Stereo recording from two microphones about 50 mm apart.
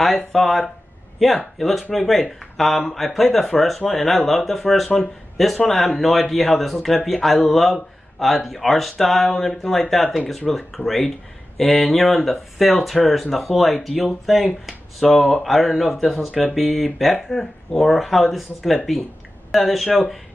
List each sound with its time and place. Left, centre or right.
0.0 s speech: centre